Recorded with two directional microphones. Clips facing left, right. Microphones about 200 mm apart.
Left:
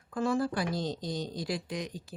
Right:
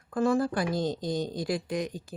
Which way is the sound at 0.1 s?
50° right (ahead or behind).